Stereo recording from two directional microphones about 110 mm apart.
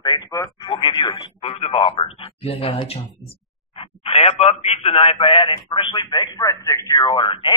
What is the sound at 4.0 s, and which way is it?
A man's voice, 65° left (ahead or behind).